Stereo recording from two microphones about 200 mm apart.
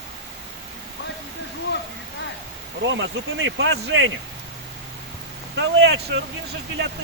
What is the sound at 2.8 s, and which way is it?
Speech, 65° right (ahead or behind).